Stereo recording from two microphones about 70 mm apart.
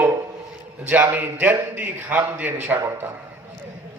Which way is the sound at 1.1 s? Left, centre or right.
Right.